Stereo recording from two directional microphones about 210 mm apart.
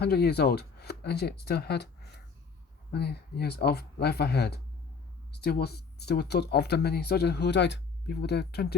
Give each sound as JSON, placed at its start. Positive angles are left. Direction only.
{"t": 0.0, "sound": "speech", "side_deg": 50}
{"t": 2.9, "sound": "speech", "side_deg": 50}